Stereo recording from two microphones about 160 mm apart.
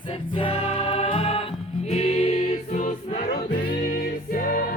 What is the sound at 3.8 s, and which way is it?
Music, 65° left (ahead or behind).